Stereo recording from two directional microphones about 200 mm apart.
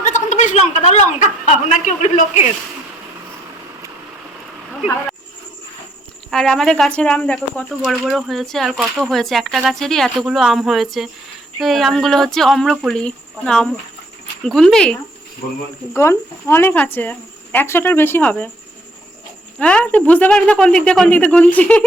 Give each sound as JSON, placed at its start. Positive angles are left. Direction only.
{"t": 0.0, "sound": "a sound", "side_deg": 35}
{"t": 1.9, "sound": "a man's voice", "side_deg": 35}
{"t": 6.3, "sound": "speech", "side_deg": 0}
{"t": 15.9, "sound": "speech", "side_deg": 15}
{"t": 19.5, "sound": "speech", "side_deg": 5}